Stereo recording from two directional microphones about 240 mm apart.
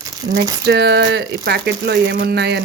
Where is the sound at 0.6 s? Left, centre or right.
Right.